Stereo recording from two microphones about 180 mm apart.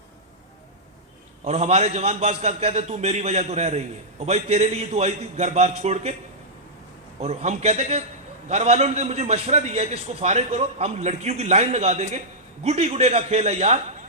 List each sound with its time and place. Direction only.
1.5 s a man's voice: 35° right (ahead or behind)
7.2 s a man's voice: 35° right (ahead or behind)